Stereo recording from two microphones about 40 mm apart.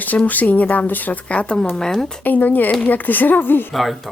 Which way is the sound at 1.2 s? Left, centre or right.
Left.